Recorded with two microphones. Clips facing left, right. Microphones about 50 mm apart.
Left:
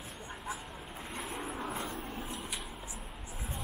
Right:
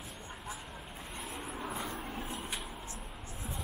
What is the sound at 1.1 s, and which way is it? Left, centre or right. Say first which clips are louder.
Vehicle: left 3 dB; centre.